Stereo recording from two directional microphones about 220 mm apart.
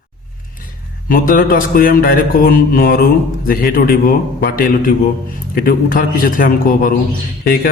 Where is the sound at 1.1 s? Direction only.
40° left (ahead or behind).